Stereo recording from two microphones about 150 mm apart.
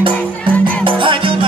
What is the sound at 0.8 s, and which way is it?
Music, 35° right (ahead or behind).